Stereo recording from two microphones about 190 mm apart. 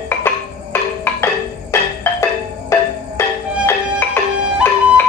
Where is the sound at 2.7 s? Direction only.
15° left (ahead or behind).